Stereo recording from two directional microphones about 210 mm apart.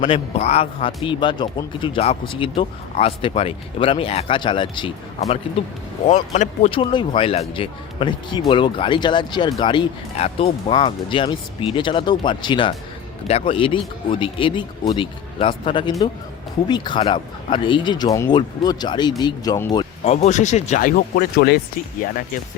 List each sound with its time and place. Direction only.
0.0 s speech: 30° left (ahead or behind)
6.1 s speech: 35° left (ahead or behind); by 19.8 s 20° left (ahead or behind)
20.1 s speech: 35° left (ahead or behind)